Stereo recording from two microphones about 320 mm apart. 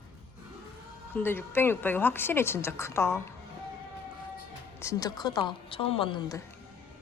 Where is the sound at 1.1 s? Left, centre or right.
Centre.